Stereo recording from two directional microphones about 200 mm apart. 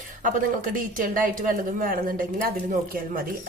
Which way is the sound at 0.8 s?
45° right (ahead or behind).